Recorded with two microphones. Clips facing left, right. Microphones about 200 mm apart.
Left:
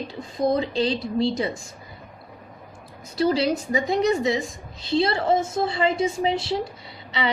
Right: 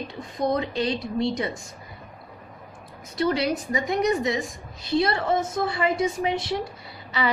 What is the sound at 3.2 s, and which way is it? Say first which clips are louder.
A woman's voice: left 2 dB; 30° left (ahead or behind).